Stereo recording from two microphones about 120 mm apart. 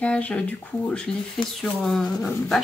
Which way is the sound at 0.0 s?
10° left (ahead or behind).